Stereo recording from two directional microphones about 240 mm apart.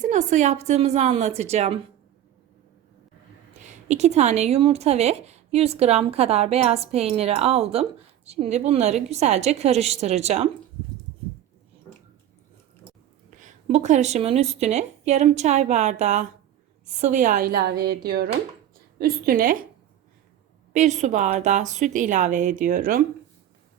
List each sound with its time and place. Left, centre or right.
0.0 s speech: right
3.6 s speech: right
13.3 s a woman's voice: right
20.7 s a woman's voice: right